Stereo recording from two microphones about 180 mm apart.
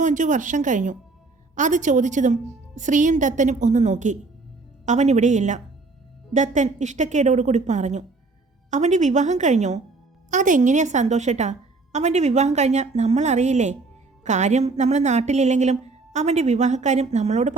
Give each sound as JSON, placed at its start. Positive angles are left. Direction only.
{"t": 0.0, "sound": "a woman's voice", "side_deg": -45}